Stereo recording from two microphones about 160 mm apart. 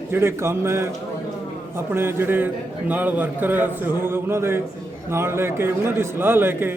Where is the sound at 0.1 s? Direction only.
15° right (ahead or behind).